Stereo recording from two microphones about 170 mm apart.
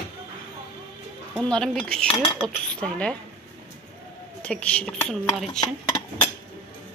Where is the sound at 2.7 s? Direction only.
5° left (ahead or behind).